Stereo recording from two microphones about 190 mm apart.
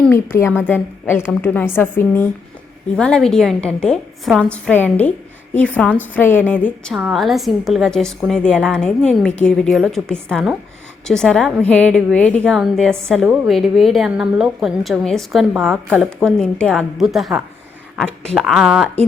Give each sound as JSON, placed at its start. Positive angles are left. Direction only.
{"t": 0.0, "sound": "a woman's voice", "side_deg": 10}
{"t": 16.0, "sound": "a woman's voice", "side_deg": 5}
{"t": 17.9, "sound": "a sound", "side_deg": 5}
{"t": 18.3, "sound": "a woman's voice", "side_deg": 0}